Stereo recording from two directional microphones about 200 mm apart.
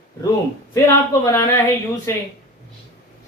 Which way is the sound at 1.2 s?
15° left (ahead or behind).